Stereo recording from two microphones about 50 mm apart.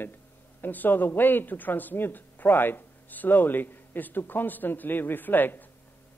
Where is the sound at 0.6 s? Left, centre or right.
Left.